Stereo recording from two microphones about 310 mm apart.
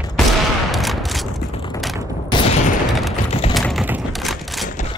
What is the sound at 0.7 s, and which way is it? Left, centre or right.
Fusillade, centre.